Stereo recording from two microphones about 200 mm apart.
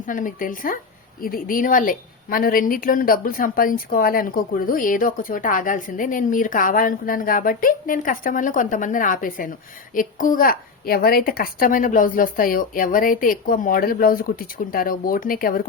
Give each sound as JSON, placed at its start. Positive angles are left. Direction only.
{"t": 0.0, "sound": "a woman's voice", "side_deg": 40}